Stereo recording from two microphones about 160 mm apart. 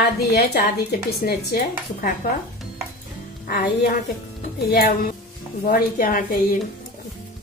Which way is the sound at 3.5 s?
75° left (ahead or behind).